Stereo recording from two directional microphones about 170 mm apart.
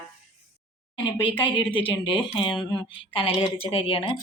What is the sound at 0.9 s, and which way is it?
Speech, 30° left (ahead or behind).